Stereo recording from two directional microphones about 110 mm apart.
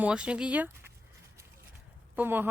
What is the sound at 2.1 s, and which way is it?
Speech, 20° right (ahead or behind).